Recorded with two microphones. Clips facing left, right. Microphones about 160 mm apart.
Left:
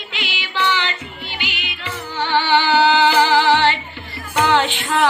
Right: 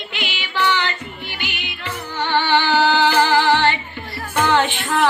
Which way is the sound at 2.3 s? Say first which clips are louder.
Left 1 dB; 15° left (ahead or behind).